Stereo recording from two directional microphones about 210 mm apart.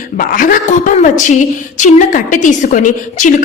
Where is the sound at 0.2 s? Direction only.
40° left (ahead or behind).